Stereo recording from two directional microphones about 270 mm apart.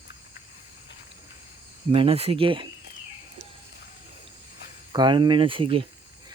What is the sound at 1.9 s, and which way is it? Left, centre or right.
Speech, right.